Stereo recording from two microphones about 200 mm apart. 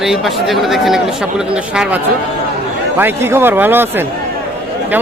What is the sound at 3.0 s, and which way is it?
A man's voice, 10° right (ahead or behind).